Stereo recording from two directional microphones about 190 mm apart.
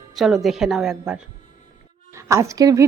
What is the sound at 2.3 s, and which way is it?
Speech, 15° right (ahead or behind).